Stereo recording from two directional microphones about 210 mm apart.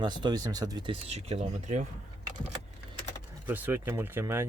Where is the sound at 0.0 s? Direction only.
20° right (ahead or behind).